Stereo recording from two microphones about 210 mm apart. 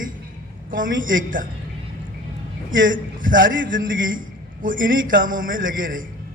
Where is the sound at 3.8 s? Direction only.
65° right (ahead or behind).